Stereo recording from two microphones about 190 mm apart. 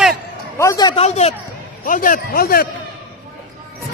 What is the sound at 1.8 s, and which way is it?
Speech, 45° left (ahead or behind).